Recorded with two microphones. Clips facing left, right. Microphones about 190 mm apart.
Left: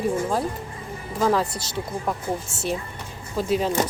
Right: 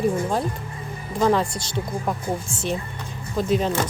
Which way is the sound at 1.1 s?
5° left (ahead or behind).